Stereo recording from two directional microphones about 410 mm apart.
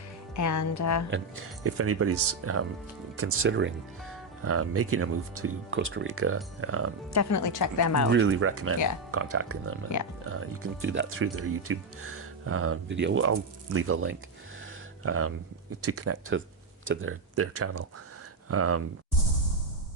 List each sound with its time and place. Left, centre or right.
0.3 s speech: left
1.6 s speech: right
7.1 s speech: left
8.1 s speech: right